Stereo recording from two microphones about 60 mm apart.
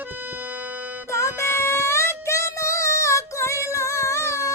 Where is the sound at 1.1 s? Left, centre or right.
Left.